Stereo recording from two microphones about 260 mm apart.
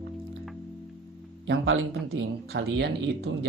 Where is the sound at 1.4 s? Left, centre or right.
Right.